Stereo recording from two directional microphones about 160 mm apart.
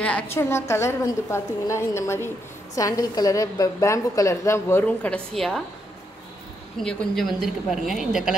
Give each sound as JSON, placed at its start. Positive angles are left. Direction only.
{"t": 0.0, "sound": "a woman's voice", "side_deg": 10}
{"t": 6.8, "sound": "a woman's voice", "side_deg": 0}